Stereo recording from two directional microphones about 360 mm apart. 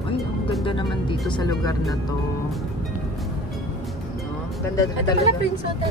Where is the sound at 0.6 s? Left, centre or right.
Centre.